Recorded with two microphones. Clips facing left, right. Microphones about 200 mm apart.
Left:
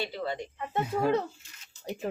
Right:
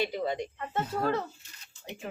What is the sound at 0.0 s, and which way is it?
Speech, 15° right (ahead or behind).